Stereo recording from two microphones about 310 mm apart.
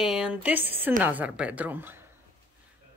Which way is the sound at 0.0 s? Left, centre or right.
Centre.